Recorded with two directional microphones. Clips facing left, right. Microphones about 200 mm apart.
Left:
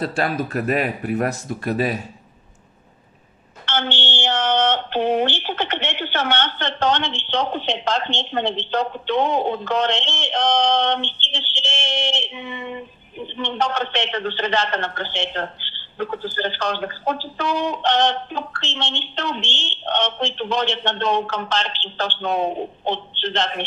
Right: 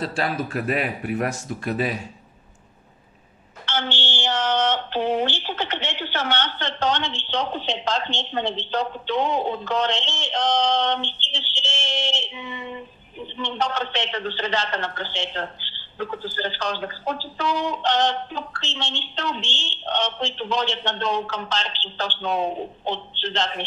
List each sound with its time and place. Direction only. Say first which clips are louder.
0.1 s speech: left 3 dB; 45° left (ahead or behind)
3.6 s speech: left 3 dB; 55° left (ahead or behind)
12.4 s a sound: left 3 dB; 55° left (ahead or behind)
13.4 s speech: left 3 dB; 60° left (ahead or behind)